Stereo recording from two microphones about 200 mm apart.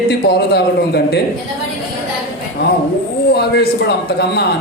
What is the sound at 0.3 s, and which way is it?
Speech, 55° left (ahead or behind).